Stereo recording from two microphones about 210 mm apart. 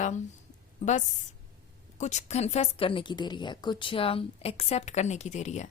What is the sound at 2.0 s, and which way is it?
A woman's voice, 35° left (ahead or behind).